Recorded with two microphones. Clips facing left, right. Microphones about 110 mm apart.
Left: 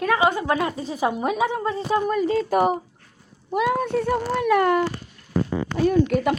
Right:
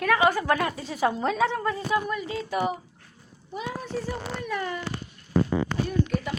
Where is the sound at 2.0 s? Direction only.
40° left (ahead or behind).